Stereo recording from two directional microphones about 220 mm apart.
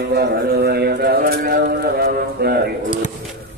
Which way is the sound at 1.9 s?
45° right (ahead or behind).